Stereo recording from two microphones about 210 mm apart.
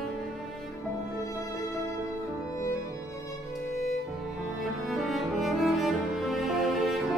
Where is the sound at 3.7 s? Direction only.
Centre (ahead or behind).